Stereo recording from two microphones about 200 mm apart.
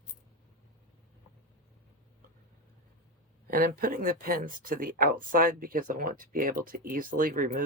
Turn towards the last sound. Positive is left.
turn(degrees=-45)  # may be behind; listen again after turning